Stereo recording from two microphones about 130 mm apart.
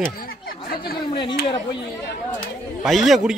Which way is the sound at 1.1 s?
40° left (ahead or behind).